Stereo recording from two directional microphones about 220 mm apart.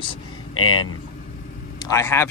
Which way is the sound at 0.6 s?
80° left.